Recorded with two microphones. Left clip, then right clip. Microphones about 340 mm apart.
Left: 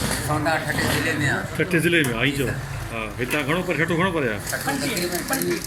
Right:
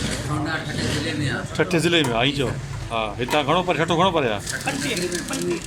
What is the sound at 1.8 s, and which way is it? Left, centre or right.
Speech, centre.